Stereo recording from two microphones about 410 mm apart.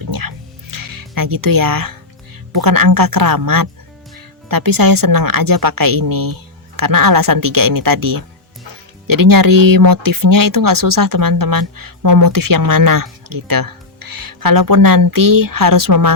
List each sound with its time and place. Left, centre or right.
0.1 s music: right
2.5 s speech: right